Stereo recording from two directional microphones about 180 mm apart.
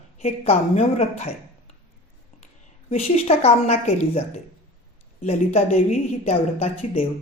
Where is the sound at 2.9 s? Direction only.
35° left (ahead or behind).